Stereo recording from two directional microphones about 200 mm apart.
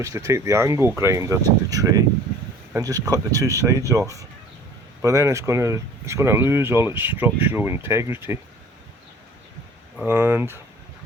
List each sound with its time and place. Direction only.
0.0 s speech: 15° right (ahead or behind)
10.0 s speech: 10° right (ahead or behind)